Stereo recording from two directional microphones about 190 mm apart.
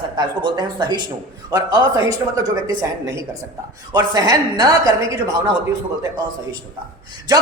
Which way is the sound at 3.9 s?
20° right (ahead or behind).